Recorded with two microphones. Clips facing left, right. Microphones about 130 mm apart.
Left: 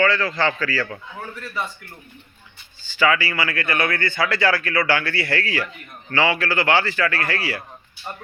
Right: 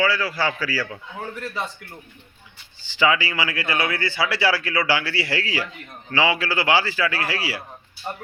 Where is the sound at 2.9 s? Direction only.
15° right (ahead or behind).